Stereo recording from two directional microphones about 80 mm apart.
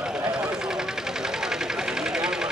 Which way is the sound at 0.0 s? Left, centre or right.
Centre.